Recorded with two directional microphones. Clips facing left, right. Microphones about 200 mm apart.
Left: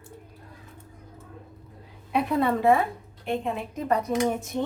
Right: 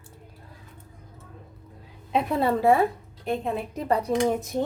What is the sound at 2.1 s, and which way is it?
A woman's voice, 30° right (ahead or behind).